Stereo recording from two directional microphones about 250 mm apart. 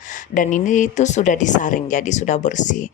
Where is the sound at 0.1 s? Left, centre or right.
Left.